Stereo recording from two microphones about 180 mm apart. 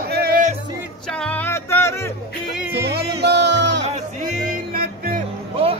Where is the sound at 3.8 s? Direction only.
45° right (ahead or behind).